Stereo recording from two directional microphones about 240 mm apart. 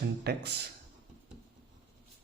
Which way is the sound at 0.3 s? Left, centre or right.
Right.